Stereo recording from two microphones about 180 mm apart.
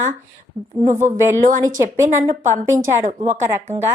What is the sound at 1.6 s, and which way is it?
A woman's voice, 20° right (ahead or behind).